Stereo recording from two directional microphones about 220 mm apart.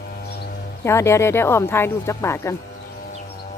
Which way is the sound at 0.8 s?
10° left (ahead or behind).